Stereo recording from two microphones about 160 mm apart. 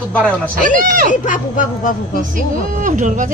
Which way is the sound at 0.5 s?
55° right (ahead or behind).